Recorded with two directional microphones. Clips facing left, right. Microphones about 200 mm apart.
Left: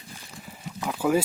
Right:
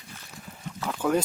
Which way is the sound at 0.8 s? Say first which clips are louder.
Left 2 dB; 10° left (ahead or behind).